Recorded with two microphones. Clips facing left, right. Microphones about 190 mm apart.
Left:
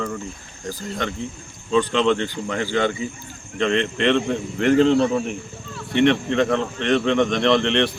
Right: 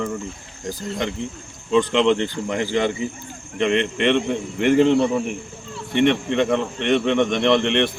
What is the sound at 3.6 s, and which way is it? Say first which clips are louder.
Speech: right 1 dB; 15° right (ahead or behind).